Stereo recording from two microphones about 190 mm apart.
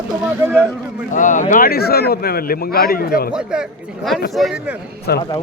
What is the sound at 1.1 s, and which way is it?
Speech, 40° left (ahead or behind).